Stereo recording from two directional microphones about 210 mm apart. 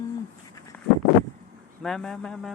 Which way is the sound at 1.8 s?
Centre (ahead or behind).